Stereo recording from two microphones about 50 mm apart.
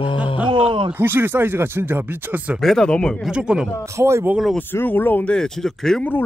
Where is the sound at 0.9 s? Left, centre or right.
Right.